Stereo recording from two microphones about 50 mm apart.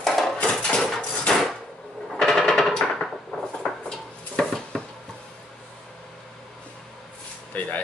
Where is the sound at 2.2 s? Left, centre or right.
Centre.